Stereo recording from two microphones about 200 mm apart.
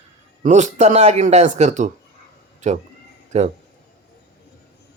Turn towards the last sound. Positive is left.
turn(degrees=-35)  # may be behind; listen again after turning